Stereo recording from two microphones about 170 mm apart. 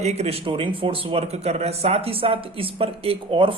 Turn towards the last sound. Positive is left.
turn(degrees=-30)  # may be behind; listen again after turning